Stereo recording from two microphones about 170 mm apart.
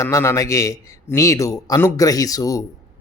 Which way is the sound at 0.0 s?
15° left (ahead or behind).